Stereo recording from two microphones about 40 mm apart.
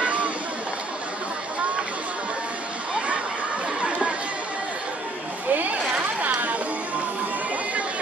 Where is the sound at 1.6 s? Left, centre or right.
Right.